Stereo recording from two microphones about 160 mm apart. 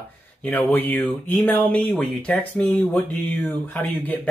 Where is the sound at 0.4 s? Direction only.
10° left (ahead or behind).